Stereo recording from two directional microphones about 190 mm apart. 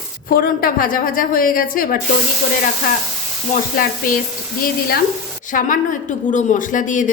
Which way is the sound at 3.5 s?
45° left (ahead or behind).